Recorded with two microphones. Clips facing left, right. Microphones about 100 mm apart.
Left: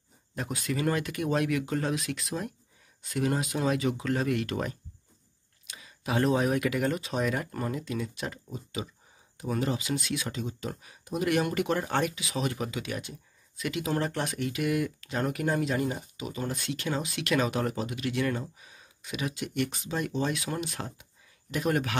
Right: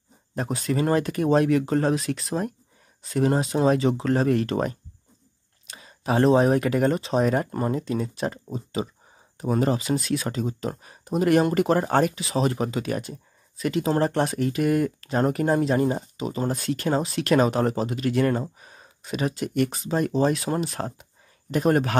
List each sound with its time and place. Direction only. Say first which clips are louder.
0.3 s speech: right 6 dB; 35° right (ahead or behind)